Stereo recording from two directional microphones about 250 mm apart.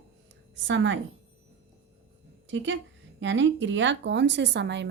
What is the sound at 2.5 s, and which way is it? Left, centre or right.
A woman's voice, right.